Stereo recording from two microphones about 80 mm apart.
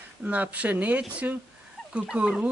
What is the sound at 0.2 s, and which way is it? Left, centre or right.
Speech, centre.